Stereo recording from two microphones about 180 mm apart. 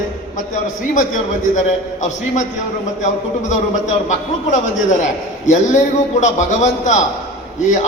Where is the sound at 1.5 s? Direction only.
40° left (ahead or behind).